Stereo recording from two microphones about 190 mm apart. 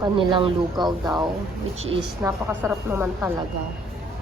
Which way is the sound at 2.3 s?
10° right (ahead or behind).